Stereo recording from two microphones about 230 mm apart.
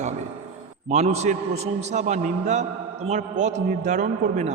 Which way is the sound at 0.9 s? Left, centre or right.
Right.